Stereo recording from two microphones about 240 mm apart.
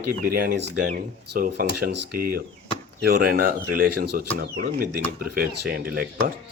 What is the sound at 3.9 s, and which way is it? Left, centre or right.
Speech, right.